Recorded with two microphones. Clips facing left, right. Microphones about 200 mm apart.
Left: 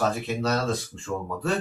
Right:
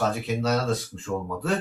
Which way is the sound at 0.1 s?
5° right (ahead or behind).